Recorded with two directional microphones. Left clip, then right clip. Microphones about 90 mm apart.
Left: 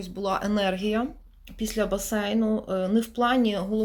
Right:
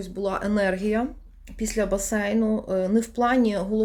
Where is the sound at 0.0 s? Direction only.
25° right (ahead or behind).